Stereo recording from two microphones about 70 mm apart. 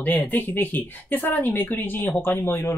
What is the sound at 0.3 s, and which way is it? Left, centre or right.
Speech, left.